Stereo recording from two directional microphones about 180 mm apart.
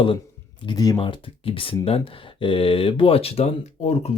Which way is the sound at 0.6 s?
20° left (ahead or behind).